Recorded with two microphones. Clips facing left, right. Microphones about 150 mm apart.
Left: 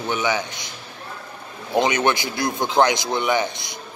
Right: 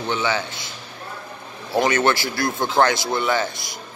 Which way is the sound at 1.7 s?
15° left (ahead or behind).